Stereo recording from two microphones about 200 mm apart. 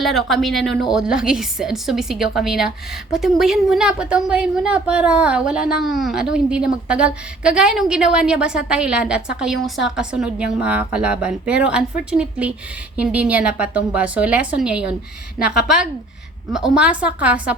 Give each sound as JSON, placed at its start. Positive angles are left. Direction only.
{"t": 0.0, "sound": "a woman's voice", "side_deg": 0}